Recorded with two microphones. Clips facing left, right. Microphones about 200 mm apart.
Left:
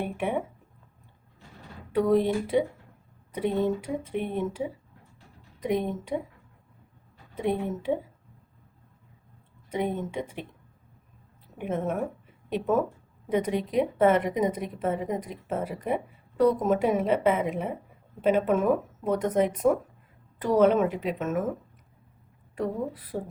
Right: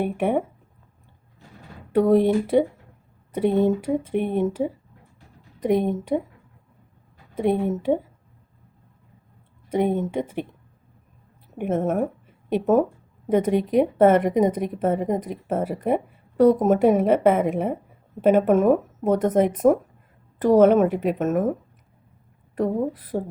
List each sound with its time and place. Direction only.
0.0 s a woman's voice: 50° right (ahead or behind)
1.9 s a woman's voice: 50° right (ahead or behind)
7.3 s a woman's voice: 50° right (ahead or behind)
9.7 s a woman's voice: 50° right (ahead or behind)
11.5 s a woman's voice: 50° right (ahead or behind)
23.1 s a woman's voice: 45° right (ahead or behind)